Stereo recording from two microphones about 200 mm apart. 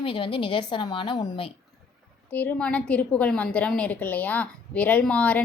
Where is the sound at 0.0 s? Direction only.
25° left (ahead or behind).